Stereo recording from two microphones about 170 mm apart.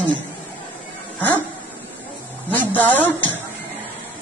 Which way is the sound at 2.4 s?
10° left (ahead or behind).